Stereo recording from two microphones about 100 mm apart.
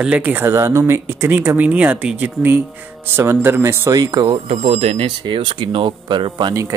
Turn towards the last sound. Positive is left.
turn(degrees=-55)  # may be behind; listen again after turning